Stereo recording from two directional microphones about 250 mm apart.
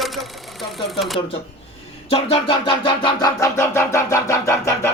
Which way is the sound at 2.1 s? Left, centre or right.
Left.